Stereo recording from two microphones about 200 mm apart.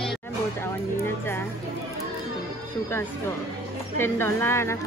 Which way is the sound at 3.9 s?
10° left (ahead or behind).